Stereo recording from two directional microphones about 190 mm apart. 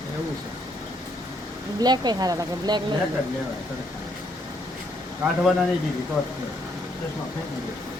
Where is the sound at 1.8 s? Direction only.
20° right (ahead or behind).